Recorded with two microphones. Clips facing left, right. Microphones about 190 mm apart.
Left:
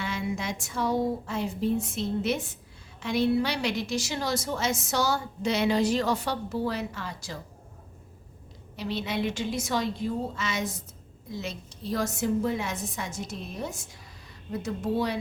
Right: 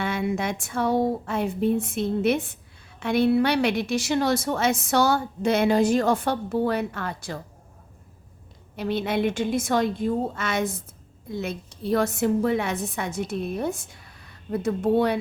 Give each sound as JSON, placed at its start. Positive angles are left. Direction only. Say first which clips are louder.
{"t": 0.0, "sound": "a woman's voice", "louder": "right 6 dB", "side_deg": -55}
{"t": 8.7, "sound": "a woman's voice", "louder": "right 6 dB", "side_deg": -55}